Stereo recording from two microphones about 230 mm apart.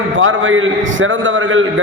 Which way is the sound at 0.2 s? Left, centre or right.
Right.